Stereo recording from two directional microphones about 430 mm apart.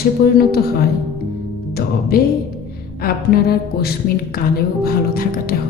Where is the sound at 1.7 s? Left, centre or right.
Left.